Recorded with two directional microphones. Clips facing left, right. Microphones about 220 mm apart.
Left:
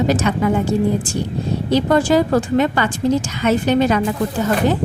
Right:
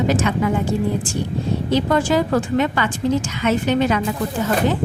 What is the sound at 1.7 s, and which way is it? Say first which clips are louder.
A woman's voice: left 3 dB; 35° left (ahead or behind).